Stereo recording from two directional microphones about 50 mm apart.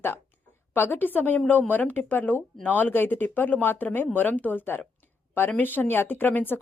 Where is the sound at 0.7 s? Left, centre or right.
Left.